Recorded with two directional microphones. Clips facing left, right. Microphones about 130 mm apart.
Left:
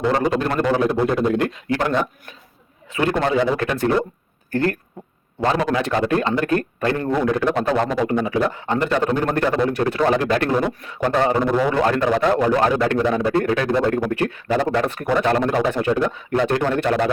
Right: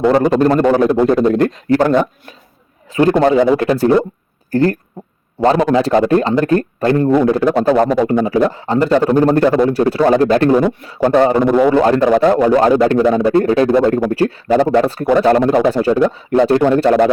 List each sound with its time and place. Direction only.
0.1 s a man's voice: 40° right (ahead or behind)
2.9 s a man's voice: 35° right (ahead or behind)